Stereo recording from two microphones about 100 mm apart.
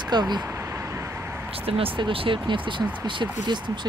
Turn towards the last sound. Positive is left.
turn(degrees=-50)  # may be behind; listen again after turning